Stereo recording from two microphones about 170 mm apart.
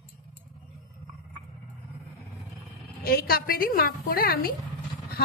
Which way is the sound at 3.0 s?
60° left (ahead or behind).